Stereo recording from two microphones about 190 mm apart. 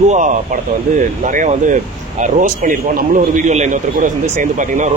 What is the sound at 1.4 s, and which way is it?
Speech, 45° right (ahead or behind).